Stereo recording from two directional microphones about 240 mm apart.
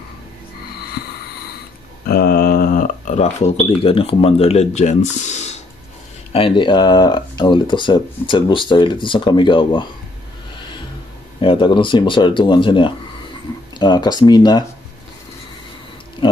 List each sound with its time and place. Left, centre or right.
2.0 s speech: left; by 9.8 s centre
11.4 s speech: centre